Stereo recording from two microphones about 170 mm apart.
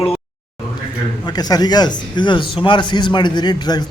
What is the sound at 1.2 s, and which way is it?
A man's voice, 25° left (ahead or behind).